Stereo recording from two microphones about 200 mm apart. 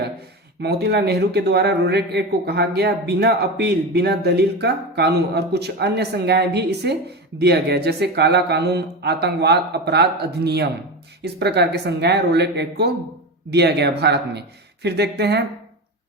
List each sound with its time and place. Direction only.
0.6 s speech: 55° right (ahead or behind)